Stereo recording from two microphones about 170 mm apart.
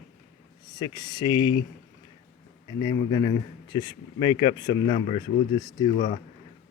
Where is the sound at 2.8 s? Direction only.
20° left (ahead or behind).